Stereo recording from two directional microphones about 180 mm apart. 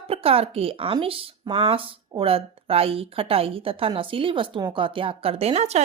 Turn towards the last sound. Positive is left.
turn(degrees=-35)  # may be behind; listen again after turning